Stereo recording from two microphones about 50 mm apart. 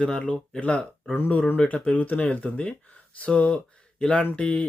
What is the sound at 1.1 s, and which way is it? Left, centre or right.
Speech, left.